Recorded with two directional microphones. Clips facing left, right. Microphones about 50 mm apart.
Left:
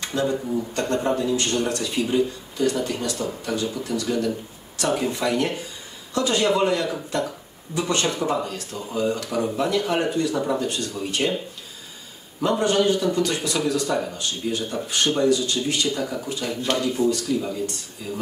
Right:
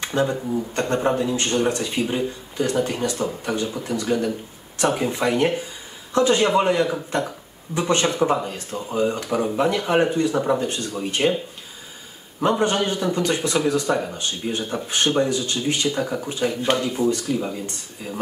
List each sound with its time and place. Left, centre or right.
0.0 s speech: right
12.4 s speech: right